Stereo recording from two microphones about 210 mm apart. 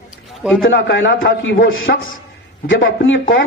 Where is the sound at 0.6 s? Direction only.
60° left (ahead or behind).